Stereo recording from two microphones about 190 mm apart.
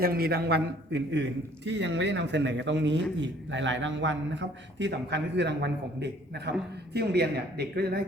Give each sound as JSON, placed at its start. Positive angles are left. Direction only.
{"t": 0.0, "sound": "a man's voice", "side_deg": -50}